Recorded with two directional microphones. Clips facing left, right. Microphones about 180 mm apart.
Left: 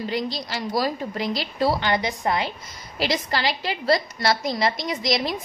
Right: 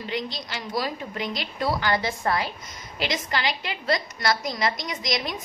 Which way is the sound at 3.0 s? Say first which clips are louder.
Left 3 dB; 35° left (ahead or behind).